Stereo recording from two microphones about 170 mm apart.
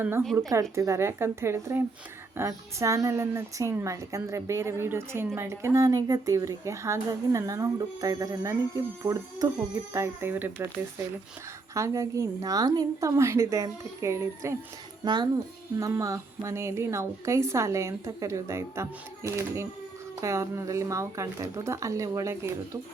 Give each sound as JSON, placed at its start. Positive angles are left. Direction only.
{"t": 0.8, "sound": "speech", "side_deg": -15}
{"t": 11.7, "sound": "a child's voice", "side_deg": -20}